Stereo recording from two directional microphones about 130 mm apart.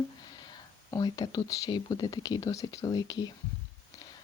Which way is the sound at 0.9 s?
30° left (ahead or behind).